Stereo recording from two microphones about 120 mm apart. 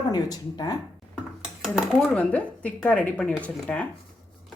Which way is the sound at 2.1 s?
10° left (ahead or behind).